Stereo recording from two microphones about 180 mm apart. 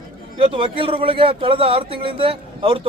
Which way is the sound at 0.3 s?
30° right (ahead or behind).